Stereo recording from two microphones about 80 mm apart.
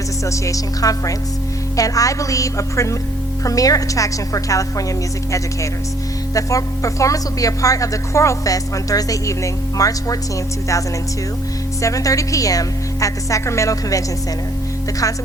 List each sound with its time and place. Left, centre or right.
0.3 s speech: left
6.3 s speech: left
11.8 s speech: left